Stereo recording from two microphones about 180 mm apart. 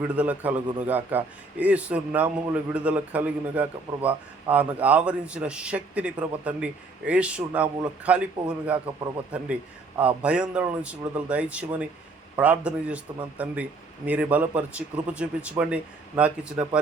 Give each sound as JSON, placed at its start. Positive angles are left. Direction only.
{"t": 0.2, "sound": "a man's voice", "side_deg": -10}